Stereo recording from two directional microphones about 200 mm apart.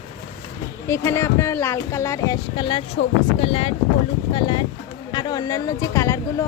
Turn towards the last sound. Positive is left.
turn(degrees=15)  # may be behind; listen again after turning